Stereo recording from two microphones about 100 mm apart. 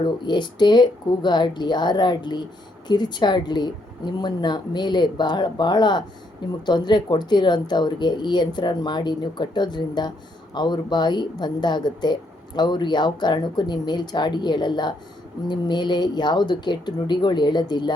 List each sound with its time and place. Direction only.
0.0 s speech: 50° left (ahead or behind)